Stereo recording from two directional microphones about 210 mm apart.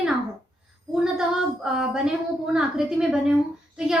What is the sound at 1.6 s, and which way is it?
A woman's voice, 5° right (ahead or behind).